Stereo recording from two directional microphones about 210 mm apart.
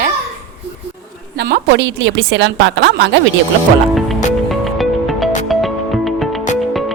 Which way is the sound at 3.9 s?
Centre (ahead or behind).